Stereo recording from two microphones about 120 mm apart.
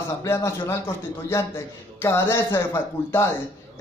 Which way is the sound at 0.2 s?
25° left (ahead or behind).